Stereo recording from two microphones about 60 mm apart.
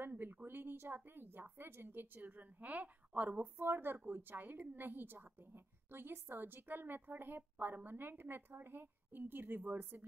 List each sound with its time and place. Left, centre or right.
0.0 s a woman's voice: right